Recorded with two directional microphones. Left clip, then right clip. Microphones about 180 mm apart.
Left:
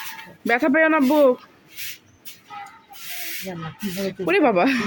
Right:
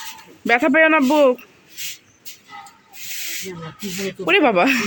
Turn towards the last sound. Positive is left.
turn(degrees=0)  # may be behind; listen again after turning